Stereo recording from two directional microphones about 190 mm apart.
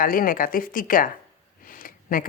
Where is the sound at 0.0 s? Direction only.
50° left (ahead or behind).